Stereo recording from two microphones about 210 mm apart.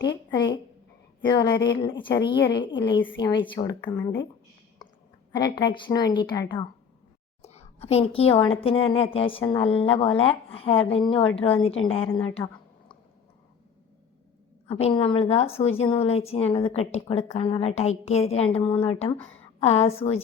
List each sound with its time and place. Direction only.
0.1 s a woman's voice: 20° left (ahead or behind)
5.5 s a woman's voice: 20° left (ahead or behind)
7.4 s a sound: 30° left (ahead or behind)
8.4 s a woman's voice: 25° left (ahead or behind)
14.7 s a woman's voice: 30° left (ahead or behind)